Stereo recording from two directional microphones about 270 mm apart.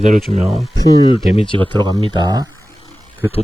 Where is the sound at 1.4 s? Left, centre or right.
Centre.